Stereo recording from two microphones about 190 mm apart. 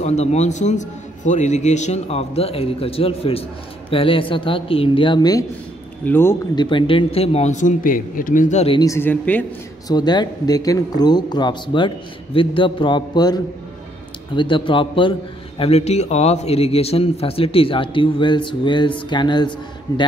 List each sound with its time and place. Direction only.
0.0 s a man's voice: 35° left (ahead or behind)
6.0 s speech: 10° left (ahead or behind)
6.5 s a man's voice: 25° left (ahead or behind)
8.7 s speech: 15° left (ahead or behind)
9.8 s a man's voice: 20° left (ahead or behind)